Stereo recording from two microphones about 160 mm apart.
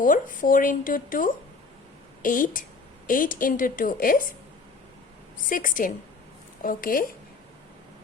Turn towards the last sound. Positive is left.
turn(degrees=60)  # may be behind; listen again after turning